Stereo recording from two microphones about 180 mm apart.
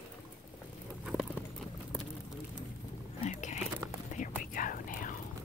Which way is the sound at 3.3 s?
40° left (ahead or behind).